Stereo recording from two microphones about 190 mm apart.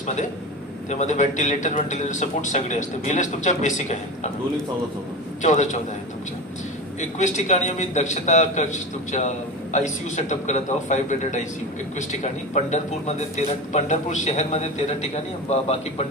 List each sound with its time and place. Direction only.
0.9 s a man's voice: 40° left (ahead or behind)
5.4 s a man's voice: 40° left (ahead or behind)
7.2 s a man's voice: 40° left (ahead or behind)